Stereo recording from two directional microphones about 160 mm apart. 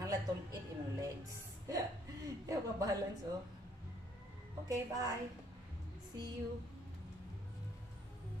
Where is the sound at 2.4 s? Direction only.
20° right (ahead or behind).